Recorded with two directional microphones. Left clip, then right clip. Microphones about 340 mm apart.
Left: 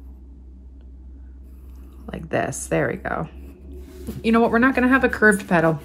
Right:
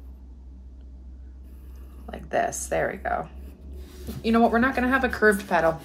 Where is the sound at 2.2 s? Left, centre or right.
Left.